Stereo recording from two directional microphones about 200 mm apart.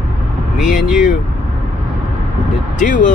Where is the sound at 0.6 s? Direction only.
40° left (ahead or behind).